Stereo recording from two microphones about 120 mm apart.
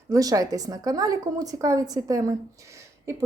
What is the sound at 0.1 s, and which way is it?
Speech, 30° right (ahead or behind).